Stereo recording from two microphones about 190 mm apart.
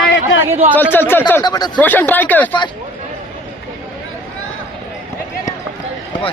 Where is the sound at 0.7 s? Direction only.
10° left (ahead or behind).